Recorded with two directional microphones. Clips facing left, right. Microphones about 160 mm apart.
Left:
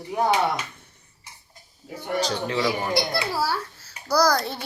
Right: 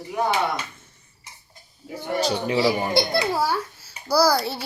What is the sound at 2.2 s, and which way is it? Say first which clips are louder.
Speech: right 2 dB; 10° right (ahead or behind).